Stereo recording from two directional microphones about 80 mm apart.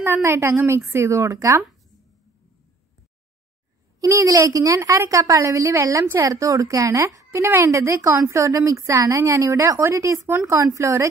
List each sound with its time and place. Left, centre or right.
0.0 s a woman's voice: right
4.0 s a woman's voice: right